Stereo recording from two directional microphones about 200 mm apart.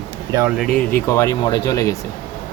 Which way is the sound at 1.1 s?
15° left (ahead or behind).